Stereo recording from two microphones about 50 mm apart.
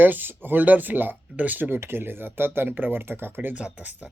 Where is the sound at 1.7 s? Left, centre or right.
Right.